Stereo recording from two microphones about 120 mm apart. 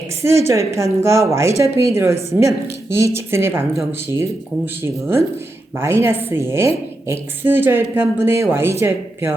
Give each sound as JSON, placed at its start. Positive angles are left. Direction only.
{"t": 0.2, "sound": "speech", "side_deg": -25}